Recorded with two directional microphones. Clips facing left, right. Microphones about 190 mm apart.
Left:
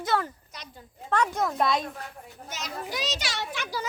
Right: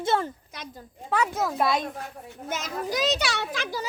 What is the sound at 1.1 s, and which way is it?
Speech, 5° right (ahead or behind).